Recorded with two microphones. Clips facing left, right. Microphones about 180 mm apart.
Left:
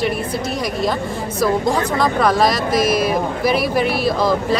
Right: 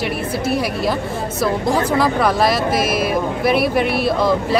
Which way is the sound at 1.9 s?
5° right (ahead or behind).